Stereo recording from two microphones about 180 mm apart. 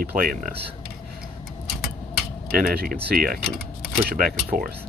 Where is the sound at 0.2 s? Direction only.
50° right (ahead or behind).